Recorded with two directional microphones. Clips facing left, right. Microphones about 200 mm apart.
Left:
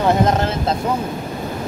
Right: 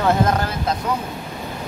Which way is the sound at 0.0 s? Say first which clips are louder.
Left 2 dB; 20° left (ahead or behind).